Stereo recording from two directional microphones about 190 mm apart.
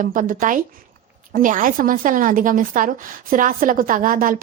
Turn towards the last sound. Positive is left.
turn(degrees=-45)  # may be behind; listen again after turning